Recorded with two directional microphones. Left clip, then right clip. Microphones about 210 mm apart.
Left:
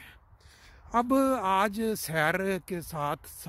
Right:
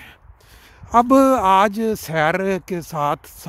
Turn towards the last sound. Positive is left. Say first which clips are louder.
# right 11 dB
turn(degrees=-15)  # may be behind; listen again after turning